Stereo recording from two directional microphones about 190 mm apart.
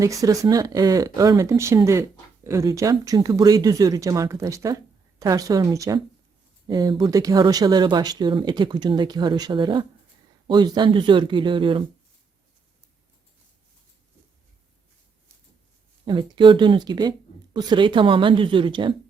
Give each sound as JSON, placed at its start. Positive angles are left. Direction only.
{"t": 0.0, "sound": "speech", "side_deg": -15}
{"t": 16.0, "sound": "speech", "side_deg": -25}